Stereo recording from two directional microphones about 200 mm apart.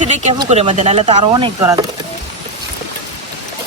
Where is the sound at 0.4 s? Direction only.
35° right (ahead or behind).